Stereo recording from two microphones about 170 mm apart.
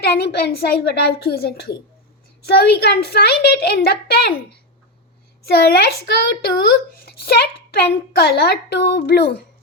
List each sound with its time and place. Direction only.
0.0 s a woman's voice: 70° left (ahead or behind)
5.5 s a woman's voice: 70° left (ahead or behind)